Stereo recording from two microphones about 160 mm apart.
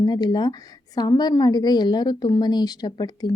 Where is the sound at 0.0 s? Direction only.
25° left (ahead or behind).